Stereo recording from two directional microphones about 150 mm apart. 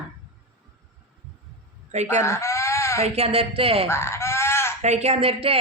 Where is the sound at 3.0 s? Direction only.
45° right (ahead or behind).